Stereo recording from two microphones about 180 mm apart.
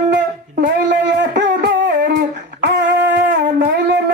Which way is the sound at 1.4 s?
75° right (ahead or behind).